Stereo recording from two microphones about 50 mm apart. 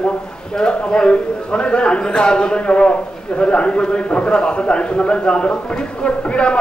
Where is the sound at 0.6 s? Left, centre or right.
Centre.